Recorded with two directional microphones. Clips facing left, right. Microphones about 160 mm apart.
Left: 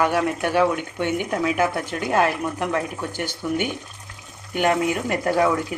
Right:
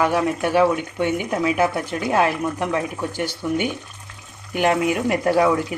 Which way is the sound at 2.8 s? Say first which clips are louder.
Right 2 dB; 10° right (ahead or behind).